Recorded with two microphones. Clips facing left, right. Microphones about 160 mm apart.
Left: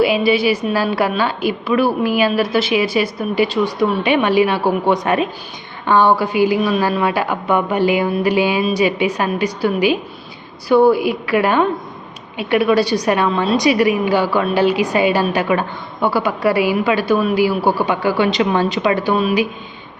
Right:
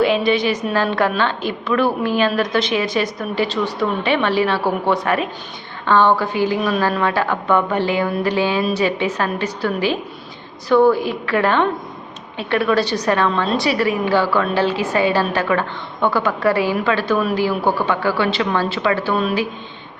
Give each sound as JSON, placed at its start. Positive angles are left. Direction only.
{"t": 0.0, "sound": "a woman's voice", "side_deg": 10}